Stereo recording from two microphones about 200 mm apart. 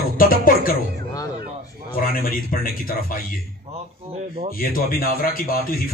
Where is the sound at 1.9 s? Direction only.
45° left (ahead or behind).